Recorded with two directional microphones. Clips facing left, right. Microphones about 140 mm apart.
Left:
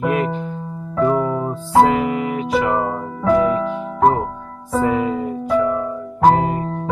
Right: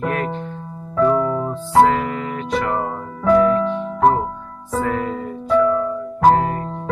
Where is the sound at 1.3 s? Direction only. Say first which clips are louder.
Even; 10° left (ahead or behind).